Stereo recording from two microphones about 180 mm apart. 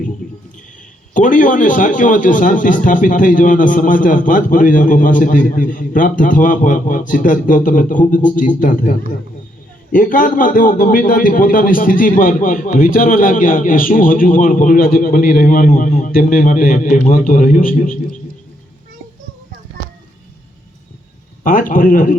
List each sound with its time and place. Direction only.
0.2 s a sound: 50° left (ahead or behind)
1.1 s a man's voice: 45° left (ahead or behind)
21.4 s a man's voice: 50° left (ahead or behind)